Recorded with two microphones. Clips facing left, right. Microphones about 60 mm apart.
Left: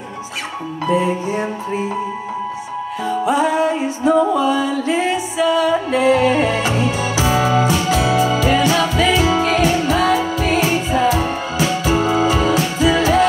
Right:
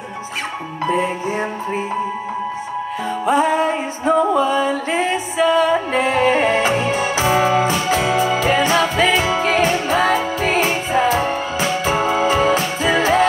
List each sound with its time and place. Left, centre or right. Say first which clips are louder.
3.1 s music: even; right